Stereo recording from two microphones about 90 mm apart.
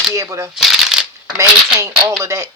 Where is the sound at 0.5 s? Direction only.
5° right (ahead or behind).